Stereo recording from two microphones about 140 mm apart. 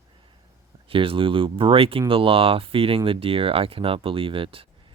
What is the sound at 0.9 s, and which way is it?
Speech, 40° right (ahead or behind).